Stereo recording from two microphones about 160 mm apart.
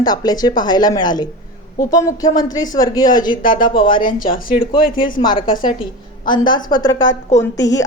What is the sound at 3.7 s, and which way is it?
Speech, 35° left (ahead or behind).